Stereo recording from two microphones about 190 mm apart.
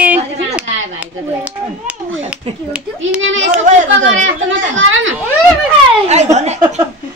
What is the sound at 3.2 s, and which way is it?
A woman's voice, 90° right.